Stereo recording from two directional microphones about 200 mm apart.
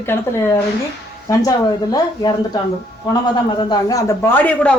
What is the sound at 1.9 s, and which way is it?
Speech, 20° left (ahead or behind).